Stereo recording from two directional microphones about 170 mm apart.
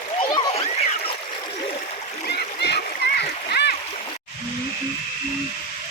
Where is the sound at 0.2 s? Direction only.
30° left (ahead or behind).